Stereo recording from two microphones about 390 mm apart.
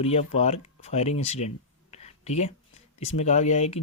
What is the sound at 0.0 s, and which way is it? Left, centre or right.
Speech, centre.